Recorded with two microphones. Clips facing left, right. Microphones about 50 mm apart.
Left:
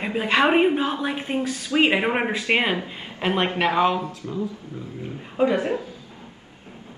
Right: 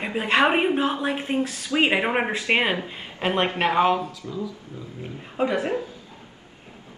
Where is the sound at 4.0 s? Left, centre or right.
Left.